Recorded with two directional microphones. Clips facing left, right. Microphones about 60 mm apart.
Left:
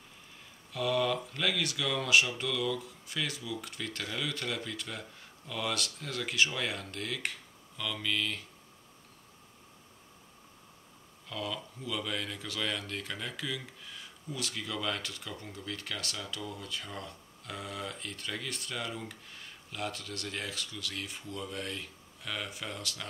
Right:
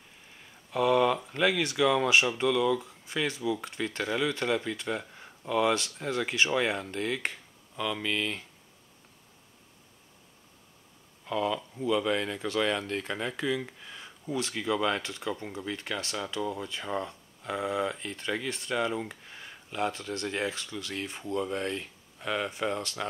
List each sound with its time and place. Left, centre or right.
0.7 s speech: right
11.2 s speech: right